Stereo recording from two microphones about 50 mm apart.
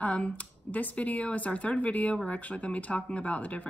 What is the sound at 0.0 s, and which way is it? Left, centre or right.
Speech, left.